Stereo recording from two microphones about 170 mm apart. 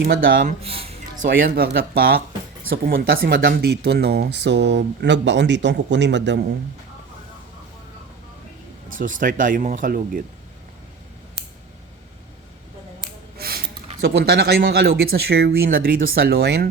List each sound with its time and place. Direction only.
0.0 s speech: 65° right (ahead or behind); by 6.4 s 90° right
8.9 s speech: 50° right (ahead or behind)
13.4 s gasp: 65° right (ahead or behind)
14.0 s speech: 75° right (ahead or behind)